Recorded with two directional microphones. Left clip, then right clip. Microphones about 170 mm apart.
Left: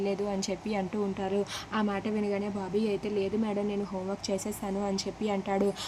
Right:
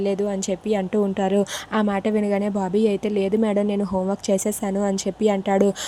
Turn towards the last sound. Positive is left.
turn(degrees=-30)  # may be behind; listen again after turning